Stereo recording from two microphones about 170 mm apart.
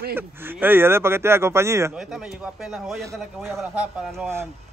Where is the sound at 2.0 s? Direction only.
5° right (ahead or behind).